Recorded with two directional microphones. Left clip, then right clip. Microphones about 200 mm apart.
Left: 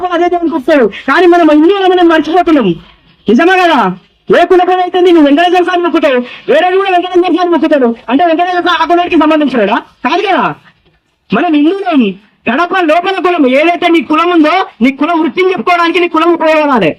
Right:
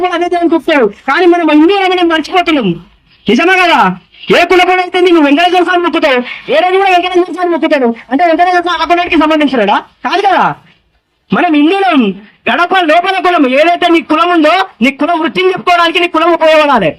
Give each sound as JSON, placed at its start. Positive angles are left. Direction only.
{"t": 0.6, "sound": "a man's voice", "side_deg": -15}
{"t": 12.5, "sound": "a man's voice", "side_deg": -15}